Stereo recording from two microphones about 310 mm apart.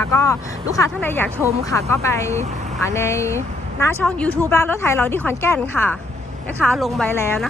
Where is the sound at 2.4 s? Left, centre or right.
Right.